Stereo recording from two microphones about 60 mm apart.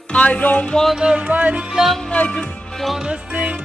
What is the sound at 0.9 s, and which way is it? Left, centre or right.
Music, centre.